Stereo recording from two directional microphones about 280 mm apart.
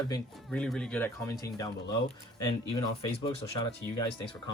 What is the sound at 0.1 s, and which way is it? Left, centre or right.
Speech, centre.